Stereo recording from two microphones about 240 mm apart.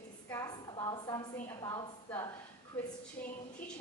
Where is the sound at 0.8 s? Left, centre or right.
Centre.